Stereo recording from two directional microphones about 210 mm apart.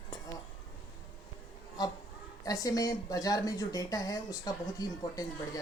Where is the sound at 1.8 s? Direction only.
20° left (ahead or behind).